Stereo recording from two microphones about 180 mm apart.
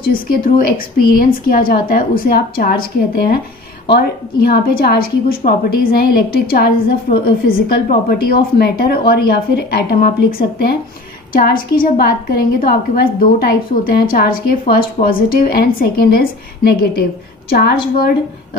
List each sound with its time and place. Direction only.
0.1 s a woman's voice: 55° left (ahead or behind)